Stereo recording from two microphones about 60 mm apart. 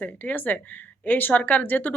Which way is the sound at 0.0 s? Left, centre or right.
Left.